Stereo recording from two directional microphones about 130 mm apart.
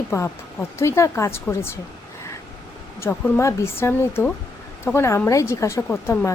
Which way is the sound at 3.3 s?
20° left (ahead or behind).